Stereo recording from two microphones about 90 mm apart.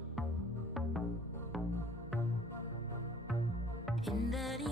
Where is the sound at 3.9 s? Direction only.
Centre (ahead or behind).